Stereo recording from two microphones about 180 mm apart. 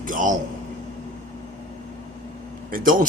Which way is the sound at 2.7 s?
50° right (ahead or behind).